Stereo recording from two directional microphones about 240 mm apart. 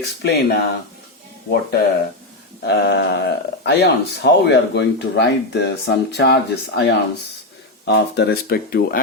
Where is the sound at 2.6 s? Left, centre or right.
Left.